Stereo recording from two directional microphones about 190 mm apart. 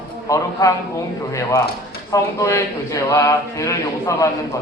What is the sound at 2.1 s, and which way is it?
Speech, 15° left (ahead or behind).